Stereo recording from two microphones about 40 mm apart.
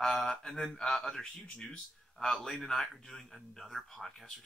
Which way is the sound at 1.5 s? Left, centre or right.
Left.